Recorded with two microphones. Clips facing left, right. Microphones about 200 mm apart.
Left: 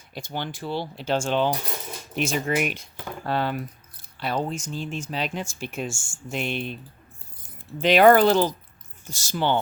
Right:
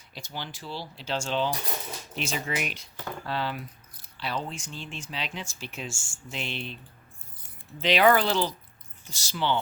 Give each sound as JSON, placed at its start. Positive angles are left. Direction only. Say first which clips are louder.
{"t": 0.1, "sound": "speech", "louder": "left 7 dB", "side_deg": 55}